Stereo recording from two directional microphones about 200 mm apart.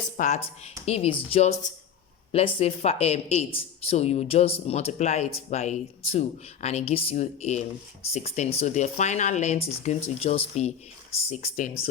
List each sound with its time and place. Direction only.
0.2 s speech: 35° left (ahead or behind)